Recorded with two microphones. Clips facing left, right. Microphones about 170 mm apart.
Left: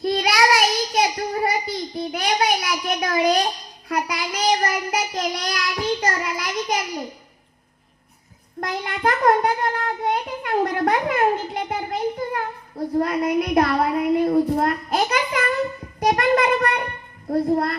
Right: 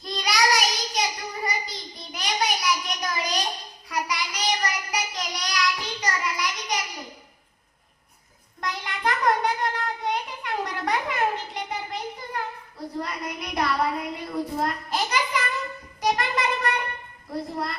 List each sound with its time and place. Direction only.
0.0 s child singing: 55° left (ahead or behind)
8.6 s child singing: 50° left (ahead or behind)
14.5 s a sound: 55° left (ahead or behind)